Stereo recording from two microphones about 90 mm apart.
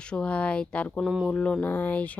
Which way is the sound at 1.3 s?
15° left (ahead or behind).